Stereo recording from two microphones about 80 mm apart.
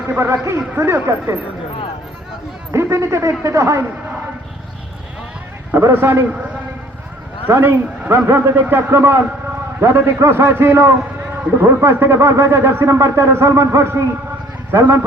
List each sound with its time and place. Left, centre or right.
0.1 s a man's voice: right
2.7 s a man's voice: right
5.9 s a man's voice: right
7.4 s a man's voice: right